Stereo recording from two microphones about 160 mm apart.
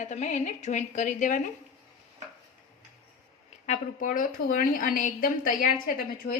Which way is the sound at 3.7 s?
55° left (ahead or behind).